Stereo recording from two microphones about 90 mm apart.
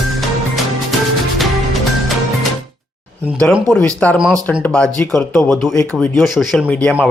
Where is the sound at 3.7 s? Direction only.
10° left (ahead or behind).